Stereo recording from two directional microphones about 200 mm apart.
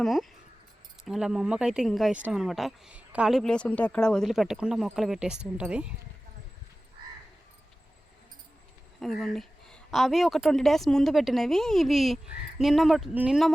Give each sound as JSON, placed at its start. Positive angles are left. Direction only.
{"t": 0.0, "sound": "speech", "side_deg": 0}
{"t": 9.0, "sound": "speech", "side_deg": 0}